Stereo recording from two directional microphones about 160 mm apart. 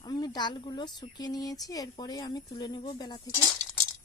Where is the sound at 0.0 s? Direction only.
25° left (ahead or behind).